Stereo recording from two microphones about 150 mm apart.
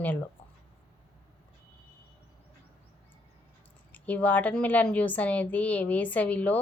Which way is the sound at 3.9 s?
10° left (ahead or behind).